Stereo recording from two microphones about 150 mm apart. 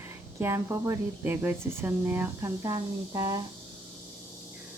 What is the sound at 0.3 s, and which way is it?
Speech, 15° right (ahead or behind).